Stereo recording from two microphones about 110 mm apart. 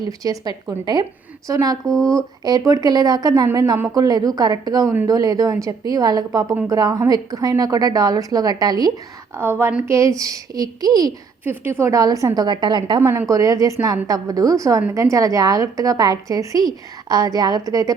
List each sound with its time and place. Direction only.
0.0 s speech: 35° right (ahead or behind)
9.4 s a woman's voice: 20° right (ahead or behind)
11.4 s speech: 20° right (ahead or behind); by 13.0 s 40° right (ahead or behind)
13.0 s speech: 25° right (ahead or behind)